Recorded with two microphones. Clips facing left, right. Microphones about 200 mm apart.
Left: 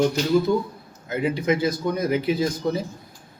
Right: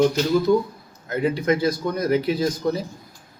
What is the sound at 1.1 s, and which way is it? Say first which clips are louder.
Speech: right 1 dB; 5° left (ahead or behind).